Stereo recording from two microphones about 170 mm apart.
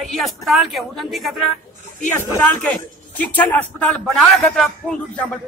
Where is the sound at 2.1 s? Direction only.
20° left (ahead or behind).